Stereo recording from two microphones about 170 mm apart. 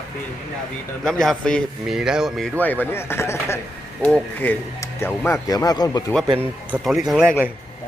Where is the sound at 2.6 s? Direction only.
10° left (ahead or behind).